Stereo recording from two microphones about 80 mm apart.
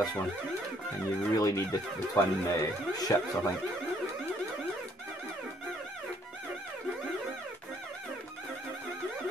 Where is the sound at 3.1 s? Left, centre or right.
Left.